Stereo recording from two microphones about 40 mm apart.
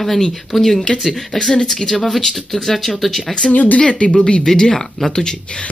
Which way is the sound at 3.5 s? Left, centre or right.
Left.